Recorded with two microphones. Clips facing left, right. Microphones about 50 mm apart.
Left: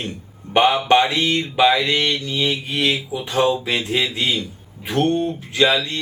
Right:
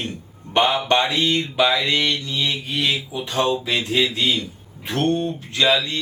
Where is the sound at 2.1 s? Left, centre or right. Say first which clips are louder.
Left 2 dB; left.